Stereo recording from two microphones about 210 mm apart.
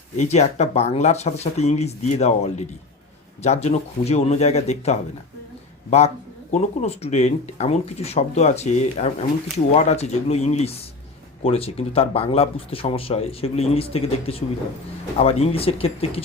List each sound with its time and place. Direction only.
0.2 s speech: 30° left (ahead or behind)
6.5 s speech: 30° left (ahead or behind)